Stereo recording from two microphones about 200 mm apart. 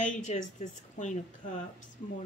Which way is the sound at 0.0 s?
40° left (ahead or behind).